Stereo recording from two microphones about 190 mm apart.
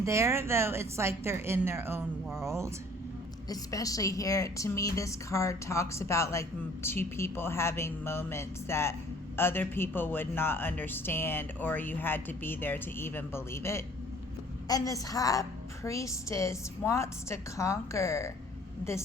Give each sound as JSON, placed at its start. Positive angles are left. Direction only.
{"t": 0.0, "sound": "a woman's voice", "side_deg": -15}
{"t": 3.5, "sound": "a woman's voice", "side_deg": 20}